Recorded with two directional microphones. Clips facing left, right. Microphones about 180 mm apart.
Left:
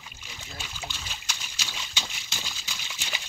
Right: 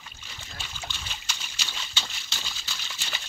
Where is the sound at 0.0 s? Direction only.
10° left (ahead or behind).